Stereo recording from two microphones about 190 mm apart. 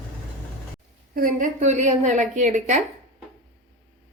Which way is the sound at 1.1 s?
45° right (ahead or behind).